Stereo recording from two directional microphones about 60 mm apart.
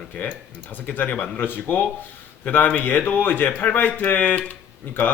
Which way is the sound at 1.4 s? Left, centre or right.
Left.